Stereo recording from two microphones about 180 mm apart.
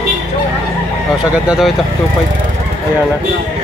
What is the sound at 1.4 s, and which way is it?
Speech, 5° right (ahead or behind).